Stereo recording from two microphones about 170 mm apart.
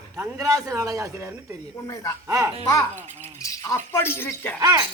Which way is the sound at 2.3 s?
20° right (ahead or behind).